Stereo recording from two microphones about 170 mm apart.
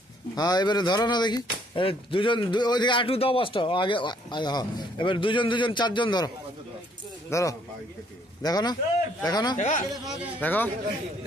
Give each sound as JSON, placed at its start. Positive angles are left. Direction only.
{"t": 0.4, "sound": "speech", "side_deg": 25}
{"t": 9.6, "sound": "speech", "side_deg": 45}
{"t": 10.4, "sound": "speech", "side_deg": 10}